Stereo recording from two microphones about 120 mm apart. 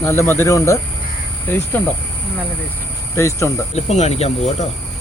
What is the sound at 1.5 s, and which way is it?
Cricket, 15° left (ahead or behind).